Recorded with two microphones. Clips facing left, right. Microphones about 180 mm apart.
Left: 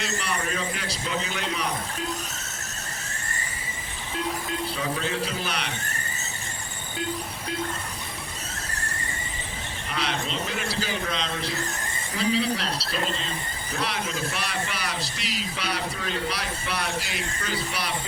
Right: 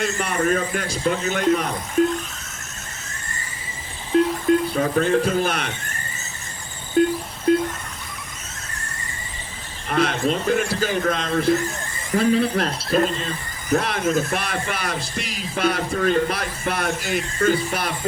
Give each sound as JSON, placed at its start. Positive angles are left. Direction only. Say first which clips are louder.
{"t": 0.0, "sound": "speech", "louder": "right 7 dB", "side_deg": -50}
{"t": 4.1, "sound": "speech", "louder": "right 13 dB", "side_deg": -50}
{"t": 7.0, "sound": "speech", "louder": "right 13 dB", "side_deg": -50}
{"t": 9.9, "sound": "speech", "louder": "right 9 dB", "side_deg": -50}